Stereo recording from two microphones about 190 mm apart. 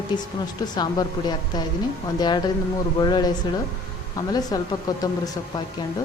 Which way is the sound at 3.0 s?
20° left (ahead or behind).